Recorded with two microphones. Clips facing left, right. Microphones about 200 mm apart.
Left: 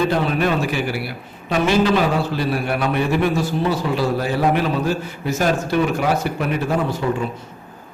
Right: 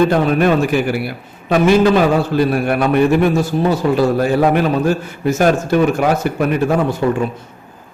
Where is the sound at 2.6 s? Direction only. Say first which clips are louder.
Right 7 dB; 50° right (ahead or behind).